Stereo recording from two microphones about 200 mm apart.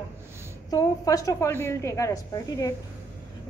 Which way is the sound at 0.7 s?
15° left (ahead or behind).